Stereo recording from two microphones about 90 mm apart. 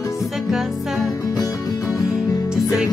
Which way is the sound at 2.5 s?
5° right (ahead or behind).